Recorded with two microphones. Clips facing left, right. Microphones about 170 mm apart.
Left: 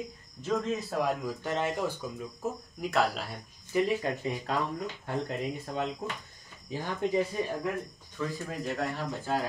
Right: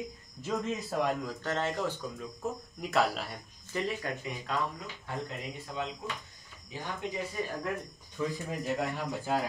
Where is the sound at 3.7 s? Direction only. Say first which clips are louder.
Left 6 dB; 10° left (ahead or behind).